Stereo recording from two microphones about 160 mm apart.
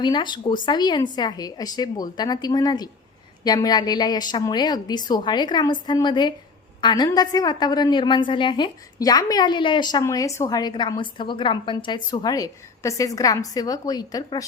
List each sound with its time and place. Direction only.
0.0 s a woman's voice: 30° left (ahead or behind)